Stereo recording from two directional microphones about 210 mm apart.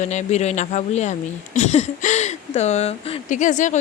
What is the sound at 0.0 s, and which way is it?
Speech, 35° left (ahead or behind).